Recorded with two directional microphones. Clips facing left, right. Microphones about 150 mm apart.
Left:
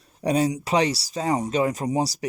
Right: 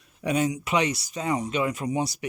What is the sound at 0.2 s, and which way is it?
Speech, 35° left (ahead or behind).